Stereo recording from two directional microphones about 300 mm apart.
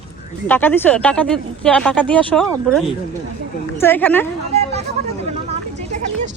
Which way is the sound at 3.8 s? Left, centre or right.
Centre.